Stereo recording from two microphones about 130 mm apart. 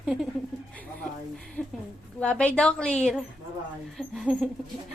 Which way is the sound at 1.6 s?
10° left (ahead or behind).